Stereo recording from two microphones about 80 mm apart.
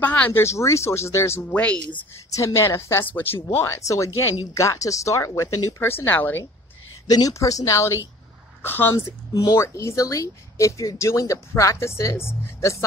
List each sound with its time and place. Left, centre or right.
0.0 s speech: centre
0.3 s speech: left
1.5 s speech: centre
2.3 s speech: left
3.4 s speech: left
7.1 s speech: left
8.9 s speech: left
9.6 s speech: left